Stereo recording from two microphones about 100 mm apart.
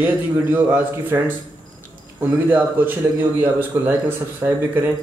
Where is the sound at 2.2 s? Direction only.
20° right (ahead or behind).